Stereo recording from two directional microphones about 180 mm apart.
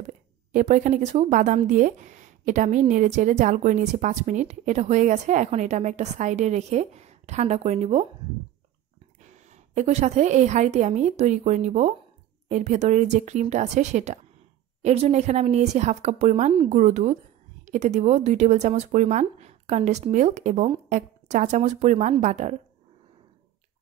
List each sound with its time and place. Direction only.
0.5 s speech: 45° right (ahead or behind)
9.2 s a woman's voice: 40° right (ahead or behind)